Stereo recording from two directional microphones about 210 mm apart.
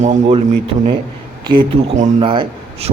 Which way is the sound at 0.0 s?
30° right (ahead or behind).